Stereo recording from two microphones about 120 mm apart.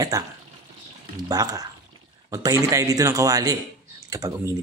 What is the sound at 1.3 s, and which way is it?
Speech, 30° right (ahead or behind).